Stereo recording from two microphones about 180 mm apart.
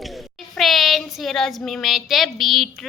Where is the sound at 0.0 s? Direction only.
Centre (ahead or behind).